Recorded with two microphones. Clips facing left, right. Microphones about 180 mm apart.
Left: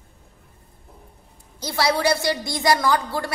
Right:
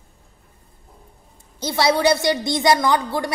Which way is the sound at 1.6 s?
20° right (ahead or behind).